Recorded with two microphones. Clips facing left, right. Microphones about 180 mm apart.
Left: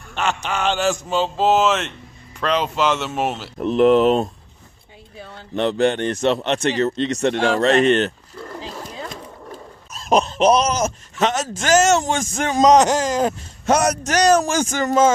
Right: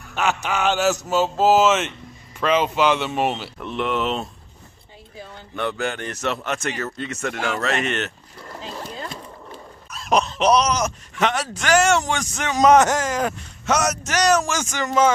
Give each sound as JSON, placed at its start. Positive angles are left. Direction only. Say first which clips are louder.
{"t": 0.1, "sound": "a man's voice", "louder": "even", "side_deg": -5}
{"t": 3.5, "sound": "speech", "louder": "left 10 dB", "side_deg": 40}
{"t": 5.6, "sound": "speech", "louder": "left 7 dB", "side_deg": 30}
{"t": 10.1, "sound": "a sound", "louder": "left 3 dB", "side_deg": 30}
{"t": 10.4, "sound": "speech", "louder": "left 2 dB", "side_deg": 50}
{"t": 10.8, "sound": "speech", "louder": "left 2 dB", "side_deg": 35}
{"t": 12.8, "sound": "speech", "louder": "left 3 dB", "side_deg": 20}
{"t": 13.7, "sound": "speech", "louder": "left 4 dB", "side_deg": 30}
{"t": 14.3, "sound": "speech", "louder": "left 3 dB", "side_deg": 50}
{"t": 14.6, "sound": "speech", "louder": "left 3 dB", "side_deg": 35}